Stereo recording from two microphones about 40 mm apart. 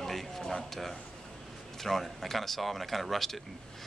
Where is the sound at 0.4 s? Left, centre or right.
Centre.